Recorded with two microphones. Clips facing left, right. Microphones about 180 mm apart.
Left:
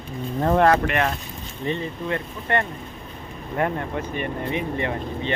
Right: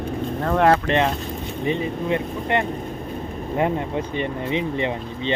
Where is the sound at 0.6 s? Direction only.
25° right (ahead or behind).